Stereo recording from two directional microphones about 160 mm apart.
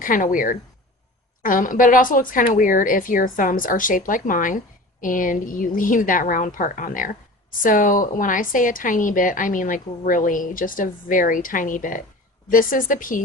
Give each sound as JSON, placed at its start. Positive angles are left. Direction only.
{"t": 0.0, "sound": "a woman's voice", "side_deg": 55}